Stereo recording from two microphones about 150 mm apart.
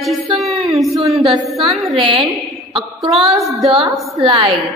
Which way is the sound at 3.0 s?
Centre (ahead or behind).